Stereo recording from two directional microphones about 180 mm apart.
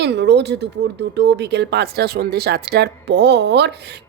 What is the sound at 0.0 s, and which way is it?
Speech, 70° right (ahead or behind).